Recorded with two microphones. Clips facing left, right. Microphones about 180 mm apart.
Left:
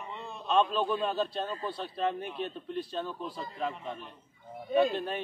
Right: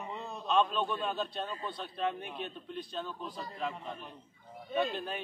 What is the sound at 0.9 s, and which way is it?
A man's voice, 5° left (ahead or behind).